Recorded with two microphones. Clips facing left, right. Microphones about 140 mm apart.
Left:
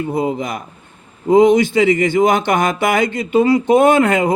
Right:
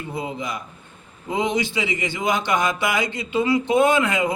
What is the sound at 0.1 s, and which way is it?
A man's voice, 45° left (ahead or behind).